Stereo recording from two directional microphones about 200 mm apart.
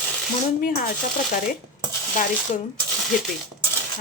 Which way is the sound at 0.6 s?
45° left (ahead or behind).